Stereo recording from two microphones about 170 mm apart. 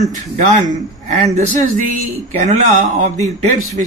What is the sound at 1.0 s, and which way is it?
A man's voice, 45° right (ahead or behind).